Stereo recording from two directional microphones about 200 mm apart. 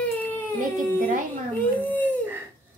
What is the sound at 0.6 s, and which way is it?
Speech, 40° right (ahead or behind).